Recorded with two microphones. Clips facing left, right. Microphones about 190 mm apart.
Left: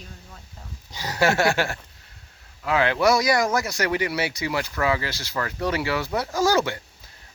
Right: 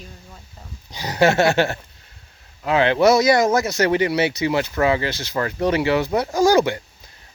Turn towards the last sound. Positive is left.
turn(degrees=-15)  # may be behind; listen again after turning